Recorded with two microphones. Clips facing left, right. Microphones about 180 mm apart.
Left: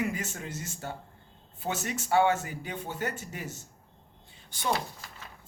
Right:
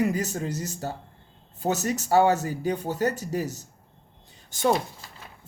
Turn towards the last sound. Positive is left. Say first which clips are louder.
# right 8 dB
turn(degrees=-45)  # may be behind; listen again after turning